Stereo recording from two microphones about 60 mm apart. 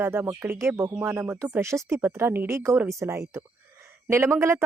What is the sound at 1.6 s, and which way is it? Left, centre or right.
Speech, right.